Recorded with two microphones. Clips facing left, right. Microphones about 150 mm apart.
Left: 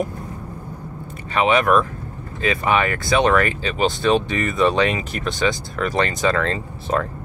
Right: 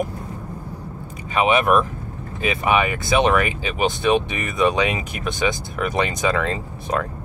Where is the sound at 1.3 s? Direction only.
15° right (ahead or behind).